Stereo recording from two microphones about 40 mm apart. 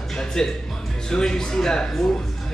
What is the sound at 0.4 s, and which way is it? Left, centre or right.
A man's voice, centre.